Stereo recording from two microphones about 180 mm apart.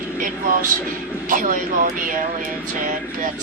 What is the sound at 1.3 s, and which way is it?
Speech, 50° right (ahead or behind).